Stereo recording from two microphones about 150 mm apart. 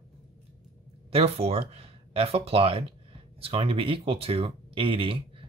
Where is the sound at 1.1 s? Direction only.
40° right (ahead or behind).